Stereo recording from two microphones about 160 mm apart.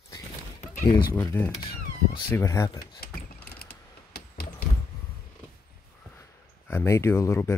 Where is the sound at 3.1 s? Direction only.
75° left (ahead or behind).